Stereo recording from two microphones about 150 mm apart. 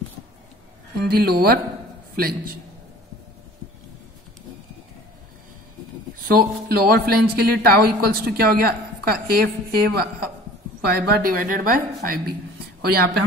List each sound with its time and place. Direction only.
1.0 s speech: 90° right
2.1 s a man's voice: 80° right
6.2 s a woman's voice: 90° right; by 12.2 s 70° right (ahead or behind)
12.8 s speech: 90° right